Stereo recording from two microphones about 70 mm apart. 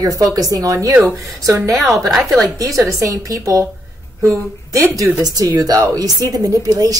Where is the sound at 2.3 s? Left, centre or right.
Right.